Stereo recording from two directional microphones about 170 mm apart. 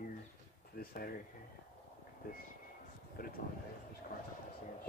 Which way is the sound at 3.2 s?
60° left (ahead or behind).